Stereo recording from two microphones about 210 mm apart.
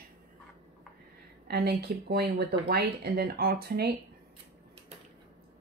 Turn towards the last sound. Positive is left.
turn(degrees=-50)  # may be behind; listen again after turning